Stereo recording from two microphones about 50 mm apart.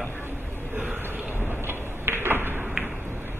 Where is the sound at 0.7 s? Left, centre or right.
Right.